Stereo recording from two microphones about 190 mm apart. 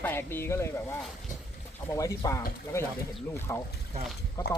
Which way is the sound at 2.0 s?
15° left (ahead or behind).